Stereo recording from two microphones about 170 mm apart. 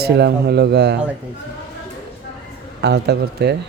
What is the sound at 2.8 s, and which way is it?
Speech, 85° right.